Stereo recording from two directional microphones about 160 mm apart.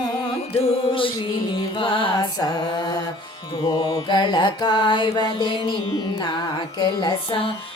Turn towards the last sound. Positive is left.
turn(degrees=35)  # may be behind; listen again after turning